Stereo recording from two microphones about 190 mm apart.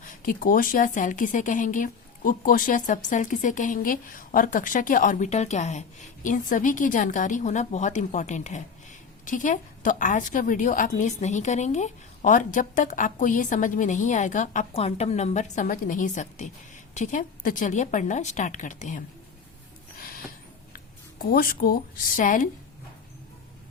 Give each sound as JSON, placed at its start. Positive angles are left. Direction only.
{"t": 0.0, "sound": "a woman's voice", "side_deg": 45}
{"t": 20.0, "sound": "a sound", "side_deg": 50}
{"t": 20.7, "sound": "speech", "side_deg": 50}